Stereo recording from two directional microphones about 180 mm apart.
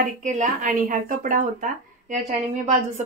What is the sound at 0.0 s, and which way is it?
A woman's voice, 45° right (ahead or behind).